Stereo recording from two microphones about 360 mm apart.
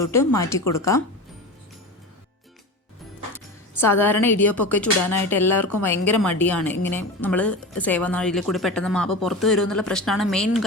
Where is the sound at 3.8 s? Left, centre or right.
Centre.